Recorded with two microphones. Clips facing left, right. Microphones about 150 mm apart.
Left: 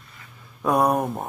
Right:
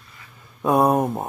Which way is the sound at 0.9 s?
25° right (ahead or behind).